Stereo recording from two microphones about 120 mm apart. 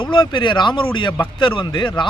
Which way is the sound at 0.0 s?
40° left (ahead or behind).